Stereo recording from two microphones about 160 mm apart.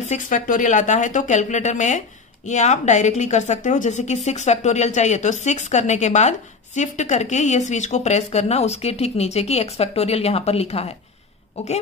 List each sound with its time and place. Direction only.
0.0 s a woman's voice: 50° left (ahead or behind)